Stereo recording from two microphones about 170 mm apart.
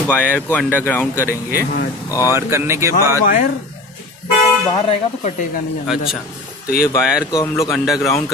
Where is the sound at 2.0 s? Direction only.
15° left (ahead or behind).